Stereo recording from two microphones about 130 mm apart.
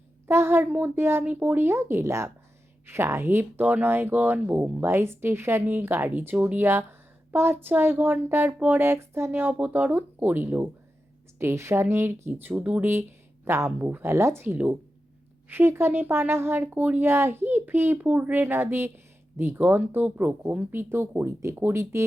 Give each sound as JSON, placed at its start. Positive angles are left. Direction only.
{"t": 0.3, "sound": "speech", "side_deg": -20}